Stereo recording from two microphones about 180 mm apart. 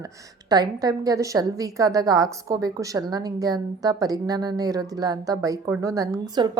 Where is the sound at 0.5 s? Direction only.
20° right (ahead or behind).